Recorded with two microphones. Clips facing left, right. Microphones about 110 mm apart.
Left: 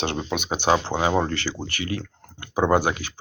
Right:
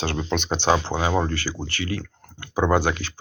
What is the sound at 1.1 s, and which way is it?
Speech, 55° left (ahead or behind).